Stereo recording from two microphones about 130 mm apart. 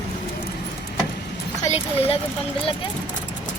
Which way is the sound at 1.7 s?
50° left (ahead or behind).